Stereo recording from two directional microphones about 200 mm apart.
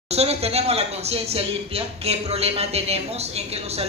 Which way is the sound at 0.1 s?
30° right (ahead or behind).